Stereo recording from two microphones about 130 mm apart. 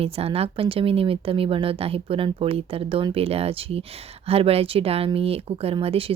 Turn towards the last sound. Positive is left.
turn(degrees=-45)  # may be behind; listen again after turning